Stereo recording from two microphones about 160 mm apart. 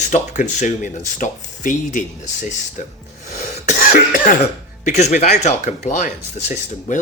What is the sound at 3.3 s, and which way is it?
Cough, 45° left (ahead or behind).